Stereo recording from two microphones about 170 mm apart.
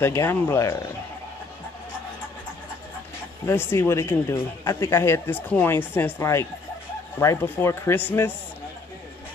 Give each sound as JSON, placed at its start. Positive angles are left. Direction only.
{"t": 0.0, "sound": "speech", "side_deg": 15}
{"t": 3.4, "sound": "speech", "side_deg": 15}